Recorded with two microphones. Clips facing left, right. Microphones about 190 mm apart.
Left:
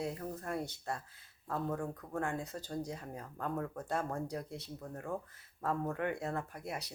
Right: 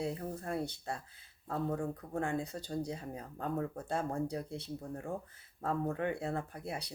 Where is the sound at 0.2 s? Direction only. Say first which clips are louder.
Right 2 dB; 30° right (ahead or behind).